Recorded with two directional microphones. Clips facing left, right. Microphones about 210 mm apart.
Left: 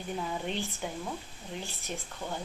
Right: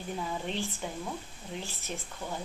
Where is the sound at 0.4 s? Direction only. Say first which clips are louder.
Even; centre (ahead or behind).